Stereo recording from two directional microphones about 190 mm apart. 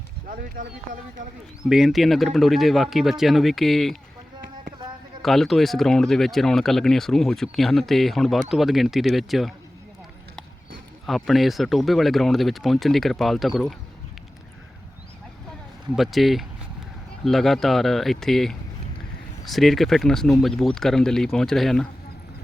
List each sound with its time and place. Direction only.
0.3 s speech: 45° right (ahead or behind)
1.7 s speech: centre (ahead or behind)
5.2 s speech: centre (ahead or behind)
11.0 s speech: centre (ahead or behind)
16.0 s speech: centre (ahead or behind)